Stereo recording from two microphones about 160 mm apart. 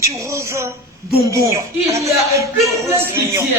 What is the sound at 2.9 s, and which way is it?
Music, 15° right (ahead or behind).